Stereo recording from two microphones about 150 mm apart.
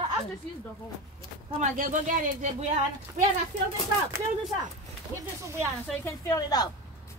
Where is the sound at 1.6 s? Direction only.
55° right (ahead or behind).